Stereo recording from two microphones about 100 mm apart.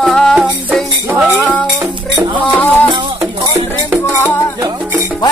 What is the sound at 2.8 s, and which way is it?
Music, 50° right (ahead or behind).